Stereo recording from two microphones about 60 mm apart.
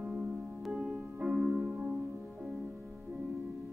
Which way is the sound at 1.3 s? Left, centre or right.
Centre.